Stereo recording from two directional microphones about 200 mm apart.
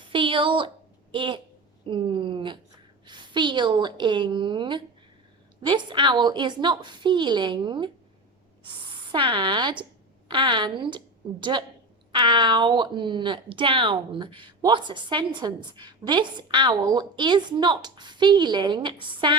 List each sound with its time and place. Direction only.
0.1 s a woman's voice: 25° right (ahead or behind)
9.1 s a woman's voice: 25° right (ahead or behind)